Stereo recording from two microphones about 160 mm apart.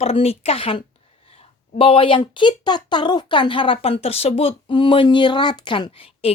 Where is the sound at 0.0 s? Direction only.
40° left (ahead or behind).